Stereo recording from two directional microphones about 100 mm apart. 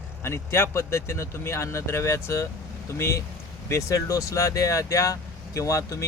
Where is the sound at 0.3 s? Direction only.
25° left (ahead or behind).